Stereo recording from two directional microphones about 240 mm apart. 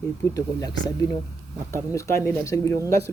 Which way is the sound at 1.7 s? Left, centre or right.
Centre.